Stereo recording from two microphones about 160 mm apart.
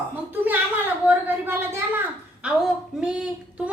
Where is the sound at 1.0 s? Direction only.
15° right (ahead or behind).